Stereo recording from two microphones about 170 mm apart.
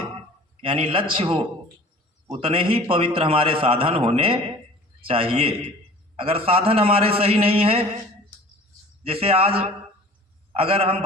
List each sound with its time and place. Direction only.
0.6 s a man's voice: 30° right (ahead or behind)
9.0 s a man's voice: 35° right (ahead or behind)